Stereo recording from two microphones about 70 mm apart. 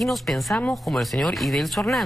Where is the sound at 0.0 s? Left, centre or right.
Centre.